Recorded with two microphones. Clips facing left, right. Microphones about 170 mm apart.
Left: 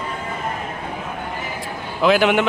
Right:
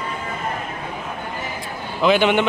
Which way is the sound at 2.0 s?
Centre (ahead or behind).